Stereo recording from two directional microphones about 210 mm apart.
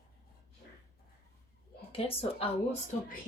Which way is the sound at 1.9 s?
25° left (ahead or behind).